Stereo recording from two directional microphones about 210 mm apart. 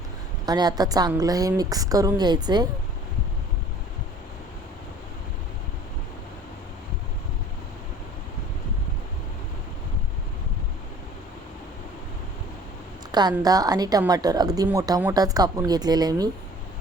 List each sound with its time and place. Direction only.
0.4 s speech: 20° right (ahead or behind)
13.1 s a sound: 20° right (ahead or behind)
13.3 s speech: 20° right (ahead or behind)